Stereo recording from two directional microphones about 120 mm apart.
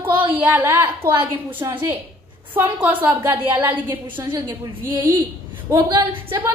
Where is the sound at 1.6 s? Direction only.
30° right (ahead or behind).